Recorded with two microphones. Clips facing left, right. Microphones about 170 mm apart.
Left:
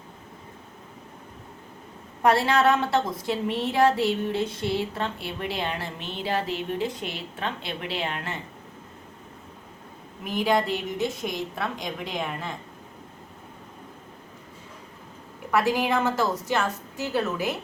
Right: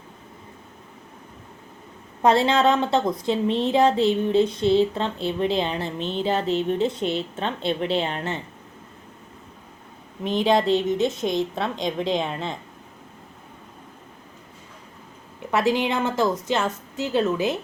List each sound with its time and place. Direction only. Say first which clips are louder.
2.2 s a woman's voice: right 2 dB; 20° right (ahead or behind)
10.2 s a woman's voice: right 4 dB; 25° right (ahead or behind)
15.5 s a woman's voice: right 1 dB; 25° right (ahead or behind)